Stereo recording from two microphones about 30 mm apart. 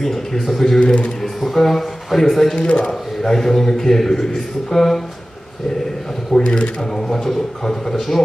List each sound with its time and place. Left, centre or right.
0.0 s a man's voice: centre
0.7 s speech: left
1.2 s speech: centre
2.5 s a man's voice: left
2.9 s a man's voice: centre
6.4 s speech: left
7.0 s a man's voice: centre